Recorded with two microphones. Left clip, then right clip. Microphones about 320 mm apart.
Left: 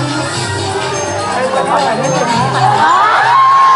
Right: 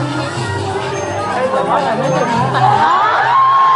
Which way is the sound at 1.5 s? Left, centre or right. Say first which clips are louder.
Left 3 dB; centre.